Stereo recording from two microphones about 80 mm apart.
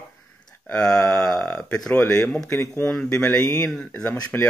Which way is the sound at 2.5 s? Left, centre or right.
Left.